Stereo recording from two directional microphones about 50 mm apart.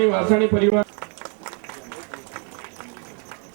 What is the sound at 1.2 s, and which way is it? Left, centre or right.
Applause, centre.